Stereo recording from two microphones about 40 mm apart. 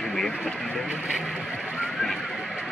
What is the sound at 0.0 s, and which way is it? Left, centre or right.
Speech, centre.